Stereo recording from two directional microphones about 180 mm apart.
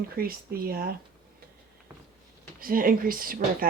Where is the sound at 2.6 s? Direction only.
50° right (ahead or behind).